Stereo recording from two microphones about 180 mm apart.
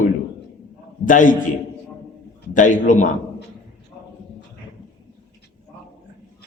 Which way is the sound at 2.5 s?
45° left (ahead or behind).